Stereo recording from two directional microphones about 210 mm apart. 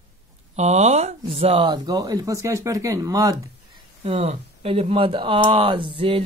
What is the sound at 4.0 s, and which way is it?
Speech, 30° right (ahead or behind).